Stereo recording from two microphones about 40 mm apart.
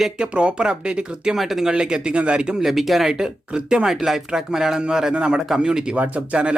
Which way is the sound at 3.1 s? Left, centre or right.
Centre.